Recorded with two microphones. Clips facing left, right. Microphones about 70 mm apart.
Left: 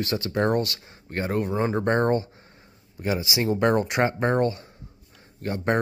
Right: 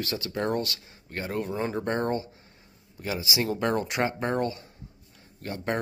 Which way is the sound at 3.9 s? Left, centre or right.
Left.